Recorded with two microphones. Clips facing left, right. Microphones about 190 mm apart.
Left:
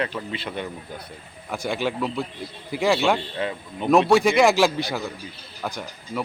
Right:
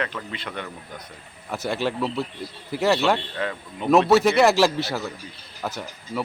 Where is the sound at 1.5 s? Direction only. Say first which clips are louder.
Even; 5° right (ahead or behind).